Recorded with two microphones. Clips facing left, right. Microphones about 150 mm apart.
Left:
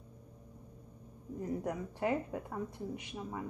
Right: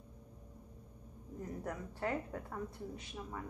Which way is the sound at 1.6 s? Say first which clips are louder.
Left 2 dB; 15° left (ahead or behind).